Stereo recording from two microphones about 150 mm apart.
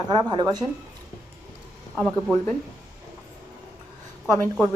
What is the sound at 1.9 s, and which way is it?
Speech, 5° left (ahead or behind).